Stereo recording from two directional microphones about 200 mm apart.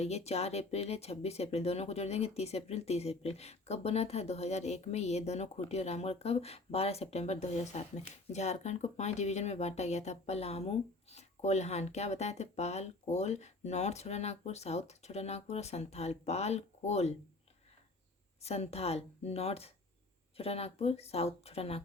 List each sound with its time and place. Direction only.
0.0 s speech: 30° left (ahead or behind)
18.4 s speech: 30° left (ahead or behind)